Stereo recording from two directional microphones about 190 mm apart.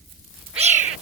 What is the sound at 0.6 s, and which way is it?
Bird, 35° right (ahead or behind).